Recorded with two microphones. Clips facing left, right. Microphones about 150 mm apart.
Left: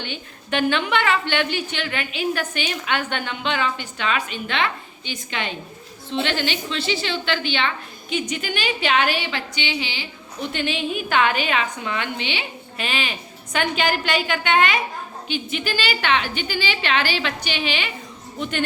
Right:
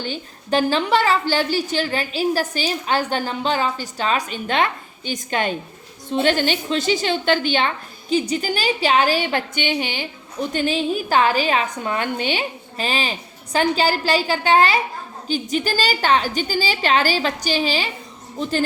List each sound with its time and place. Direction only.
0.0 s a woman's voice: 40° right (ahead or behind)
8.1 s a woman's voice: 35° right (ahead or behind)